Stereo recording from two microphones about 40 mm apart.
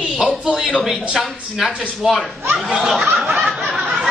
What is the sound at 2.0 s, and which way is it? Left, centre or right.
Speech, right.